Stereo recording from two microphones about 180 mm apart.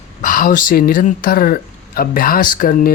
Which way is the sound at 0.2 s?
50° left (ahead or behind).